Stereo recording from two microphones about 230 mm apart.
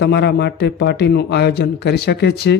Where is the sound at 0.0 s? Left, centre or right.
Left.